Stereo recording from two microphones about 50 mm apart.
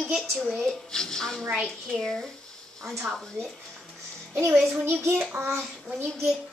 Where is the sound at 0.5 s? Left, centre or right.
Centre.